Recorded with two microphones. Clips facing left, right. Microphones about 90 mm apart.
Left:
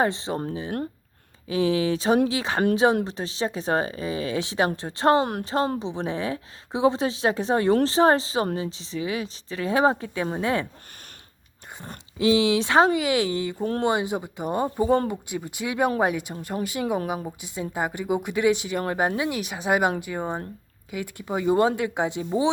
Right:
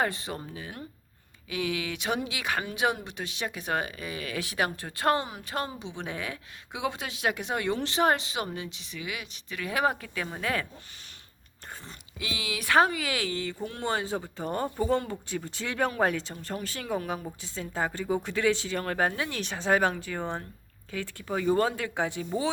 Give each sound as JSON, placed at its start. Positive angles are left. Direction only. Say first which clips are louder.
{"t": 0.0, "sound": "speech", "louder": "left 6 dB", "side_deg": 25}
{"t": 1.5, "sound": "a woman's voice", "louder": "left 9 dB", "side_deg": 30}
{"t": 5.2, "sound": "speech", "louder": "left 12 dB", "side_deg": 60}
{"t": 5.8, "sound": "a woman's voice", "louder": "left 8 dB", "side_deg": 30}
{"t": 12.2, "sound": "speech", "louder": "left 15 dB", "side_deg": 30}